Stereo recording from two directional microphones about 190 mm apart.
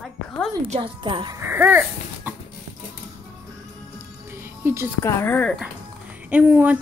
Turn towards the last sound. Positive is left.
turn(degrees=-10)  # may be behind; listen again after turning